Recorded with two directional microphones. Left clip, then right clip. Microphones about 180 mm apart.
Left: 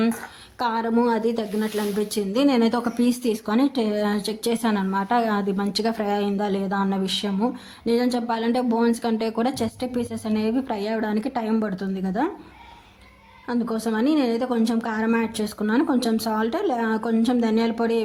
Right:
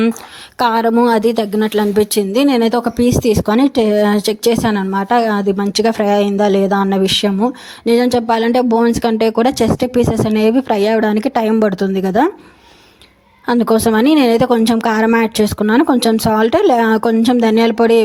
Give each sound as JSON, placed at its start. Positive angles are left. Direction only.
{"t": 0.6, "sound": "a woman's voice", "side_deg": -45}
{"t": 13.4, "sound": "speech", "side_deg": -50}